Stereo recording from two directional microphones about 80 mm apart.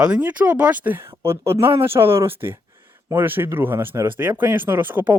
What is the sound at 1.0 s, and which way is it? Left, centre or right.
Speech, right.